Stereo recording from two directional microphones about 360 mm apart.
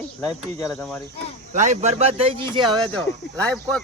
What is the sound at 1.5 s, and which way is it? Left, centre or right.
Speech, centre.